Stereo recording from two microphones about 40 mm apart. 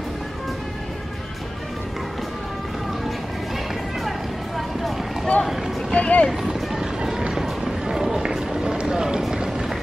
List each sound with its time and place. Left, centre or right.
4.6 s music: centre
5.9 s vehicle: left
6.4 s run: centre